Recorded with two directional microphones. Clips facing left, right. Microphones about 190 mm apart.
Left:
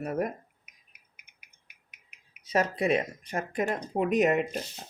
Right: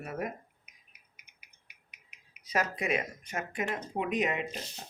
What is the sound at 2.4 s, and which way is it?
Speech, 30° left (ahead or behind).